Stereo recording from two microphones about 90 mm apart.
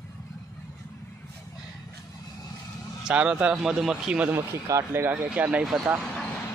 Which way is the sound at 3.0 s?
10° right (ahead or behind).